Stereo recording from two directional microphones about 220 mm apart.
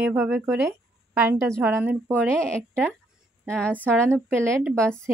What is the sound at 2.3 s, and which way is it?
A woman's voice, 5° left (ahead or behind).